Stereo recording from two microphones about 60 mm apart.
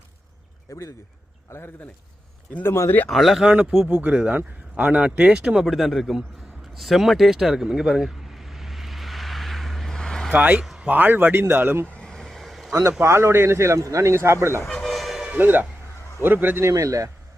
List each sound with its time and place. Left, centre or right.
0.7 s speech: left
1.5 s speech: left
3.1 s speech: centre
3.4 s speech: right
5.6 s speech: centre
6.7 s a sound: centre
10.3 s speech: right
11.9 s vehicle: centre
13.0 s speech: right
14.8 s train: centre
15.3 s speech: right
16.6 s speech: right